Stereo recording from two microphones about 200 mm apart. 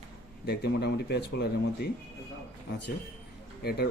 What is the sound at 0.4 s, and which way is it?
Speech, 55° left (ahead or behind).